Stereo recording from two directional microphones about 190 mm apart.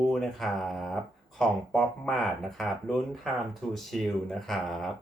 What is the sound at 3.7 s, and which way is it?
Speech, centre (ahead or behind).